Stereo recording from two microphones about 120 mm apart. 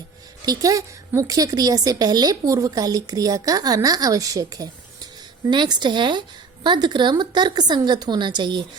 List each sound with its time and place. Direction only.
0.4 s a woman's voice: 30° right (ahead or behind)